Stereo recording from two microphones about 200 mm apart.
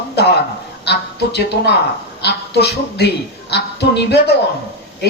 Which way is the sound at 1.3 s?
55° left (ahead or behind).